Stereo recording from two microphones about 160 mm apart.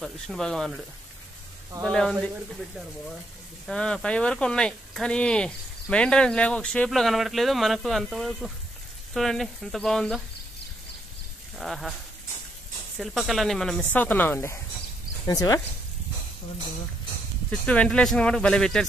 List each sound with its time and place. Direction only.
0.0 s speech: centre (ahead or behind)
1.8 s speech: 5° left (ahead or behind)
3.6 s speech: 5° left (ahead or behind)
11.5 s speech: centre (ahead or behind)
12.9 s speech: centre (ahead or behind); by 15.6 s 25° left (ahead or behind)
17.5 s speech: 5° left (ahead or behind)